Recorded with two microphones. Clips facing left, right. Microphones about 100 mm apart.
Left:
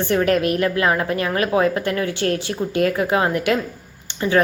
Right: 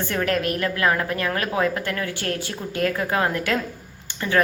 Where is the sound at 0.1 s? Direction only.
20° left (ahead or behind).